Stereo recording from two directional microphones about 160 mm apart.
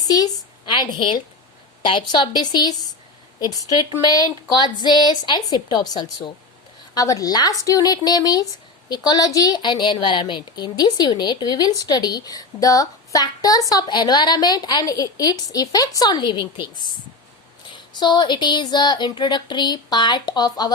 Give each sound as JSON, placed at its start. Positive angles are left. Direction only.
{"t": 0.0, "sound": "a woman's voice", "side_deg": 25}
{"t": 3.9, "sound": "a woman's voice", "side_deg": 25}